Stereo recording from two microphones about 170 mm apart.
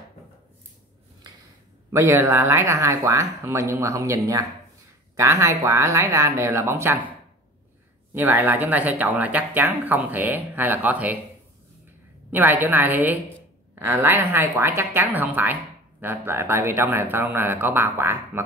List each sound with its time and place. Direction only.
1.9 s speech: 15° right (ahead or behind)
8.1 s speech: 10° right (ahead or behind)
12.3 s speech: 10° right (ahead or behind)